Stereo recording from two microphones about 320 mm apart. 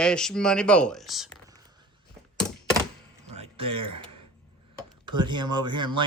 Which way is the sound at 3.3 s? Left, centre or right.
Centre.